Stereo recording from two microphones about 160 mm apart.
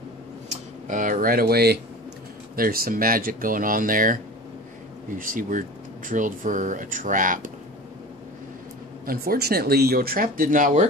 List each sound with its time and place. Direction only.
0.5 s speech: 55° right (ahead or behind); by 1.8 s 80° right
2.5 s speech: 65° right (ahead or behind)
9.0 s speech: 65° right (ahead or behind)